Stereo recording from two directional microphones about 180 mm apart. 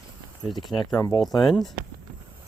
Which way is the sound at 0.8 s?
25° left (ahead or behind).